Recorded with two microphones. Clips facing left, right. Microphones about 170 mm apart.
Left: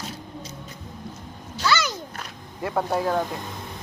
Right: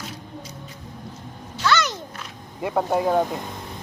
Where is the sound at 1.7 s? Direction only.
Centre (ahead or behind).